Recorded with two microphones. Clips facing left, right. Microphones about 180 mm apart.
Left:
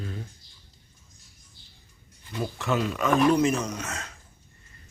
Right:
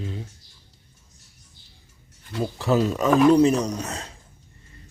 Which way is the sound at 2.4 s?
35° right (ahead or behind).